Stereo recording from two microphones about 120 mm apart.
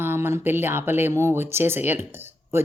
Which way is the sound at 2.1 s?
20° right (ahead or behind).